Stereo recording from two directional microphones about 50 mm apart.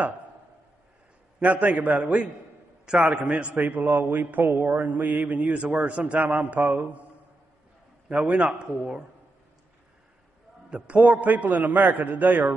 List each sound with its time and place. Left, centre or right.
1.4 s a man's voice: right
8.1 s a man's voice: right
10.7 s a man's voice: right